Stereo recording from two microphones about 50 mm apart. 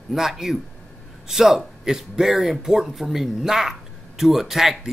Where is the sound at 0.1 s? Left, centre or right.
Centre.